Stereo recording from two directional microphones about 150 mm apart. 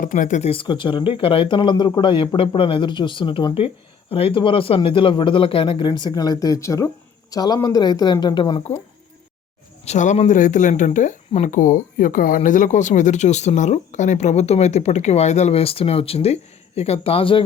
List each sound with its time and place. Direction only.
0.0 s speech: 60° left (ahead or behind)
0.5 s speech: 35° left (ahead or behind)
9.8 s speech: 50° left (ahead or behind)